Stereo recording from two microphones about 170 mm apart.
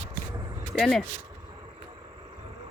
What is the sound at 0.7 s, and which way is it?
Speech, centre (ahead or behind).